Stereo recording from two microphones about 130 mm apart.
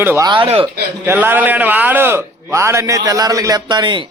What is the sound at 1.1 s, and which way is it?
A man's voice, 15° right (ahead or behind).